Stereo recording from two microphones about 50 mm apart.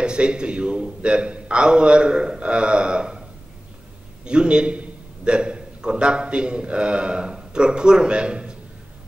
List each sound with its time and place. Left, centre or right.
0.0 s a man's voice: centre